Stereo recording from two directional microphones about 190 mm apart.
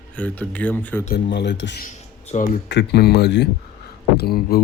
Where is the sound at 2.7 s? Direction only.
60° left (ahead or behind).